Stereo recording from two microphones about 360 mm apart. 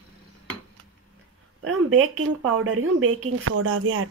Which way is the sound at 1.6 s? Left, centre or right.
Right.